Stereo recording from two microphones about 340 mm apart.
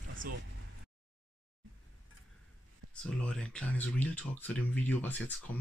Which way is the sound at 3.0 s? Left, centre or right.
Centre.